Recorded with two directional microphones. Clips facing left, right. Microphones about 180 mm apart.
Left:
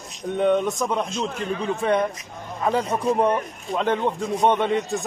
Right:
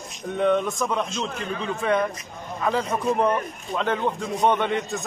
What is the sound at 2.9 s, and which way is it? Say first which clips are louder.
Speech: left 2 dB; 5° left (ahead or behind).